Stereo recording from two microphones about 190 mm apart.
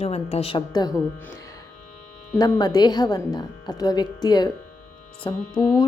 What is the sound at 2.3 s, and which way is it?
Speech, 20° left (ahead or behind).